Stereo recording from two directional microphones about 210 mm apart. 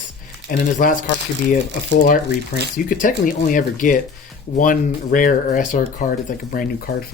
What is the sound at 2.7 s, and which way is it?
Speech, 40° left (ahead or behind).